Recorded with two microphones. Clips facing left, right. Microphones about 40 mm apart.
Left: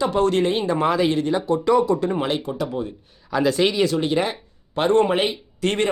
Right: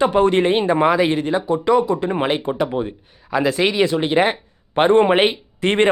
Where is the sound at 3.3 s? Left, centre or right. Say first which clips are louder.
Right 1 dB; centre.